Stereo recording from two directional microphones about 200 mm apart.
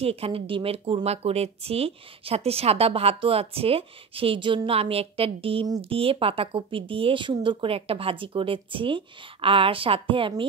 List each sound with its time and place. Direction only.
0.0 s speech: 30° right (ahead or behind)